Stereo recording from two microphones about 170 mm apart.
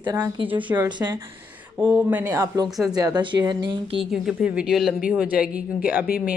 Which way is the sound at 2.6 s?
Centre (ahead or behind).